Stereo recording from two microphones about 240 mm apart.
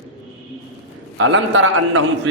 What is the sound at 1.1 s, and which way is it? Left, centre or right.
Speech, right.